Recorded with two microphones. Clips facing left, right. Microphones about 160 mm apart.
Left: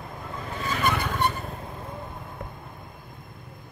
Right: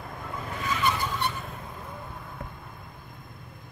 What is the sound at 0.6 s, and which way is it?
Vehicle, 50° left (ahead or behind).